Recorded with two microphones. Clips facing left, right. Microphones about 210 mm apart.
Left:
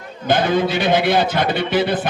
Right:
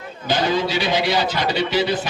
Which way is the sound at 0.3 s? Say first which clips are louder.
Left 3 dB; 55° left (ahead or behind).